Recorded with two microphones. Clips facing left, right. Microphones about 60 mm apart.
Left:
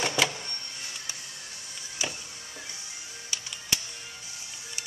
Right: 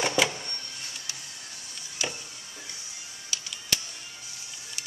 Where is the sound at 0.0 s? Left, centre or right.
Centre.